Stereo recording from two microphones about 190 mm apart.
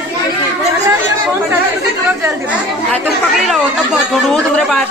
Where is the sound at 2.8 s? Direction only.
Centre (ahead or behind).